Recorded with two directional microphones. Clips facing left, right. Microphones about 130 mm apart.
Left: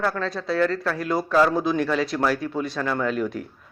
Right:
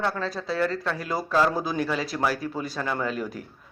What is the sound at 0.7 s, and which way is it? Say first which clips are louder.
Speech: left 3 dB; 25° right (ahead or behind).